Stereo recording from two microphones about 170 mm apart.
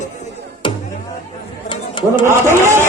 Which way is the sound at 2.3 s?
15° right (ahead or behind).